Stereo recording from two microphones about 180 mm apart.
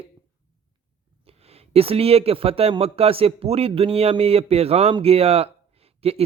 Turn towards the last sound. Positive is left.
turn(degrees=-35)  # may be behind; listen again after turning